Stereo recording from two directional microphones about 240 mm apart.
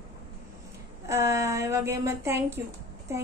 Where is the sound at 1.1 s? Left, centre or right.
Centre.